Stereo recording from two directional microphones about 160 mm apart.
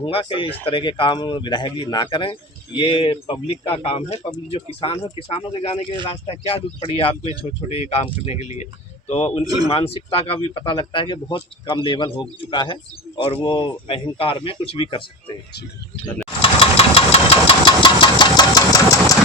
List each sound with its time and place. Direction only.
0.0 s speech: 35° left (ahead or behind)
16.4 s engine: 35° left (ahead or behind)